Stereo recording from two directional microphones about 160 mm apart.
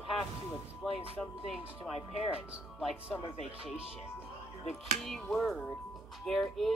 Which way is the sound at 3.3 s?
5° right (ahead or behind).